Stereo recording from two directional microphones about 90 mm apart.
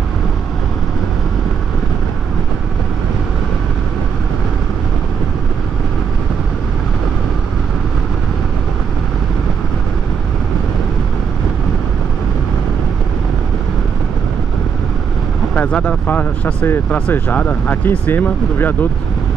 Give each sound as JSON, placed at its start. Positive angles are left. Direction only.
{"t": 15.5, "sound": "speech", "side_deg": 15}